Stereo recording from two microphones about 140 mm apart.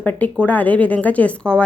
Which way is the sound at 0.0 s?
10° left (ahead or behind).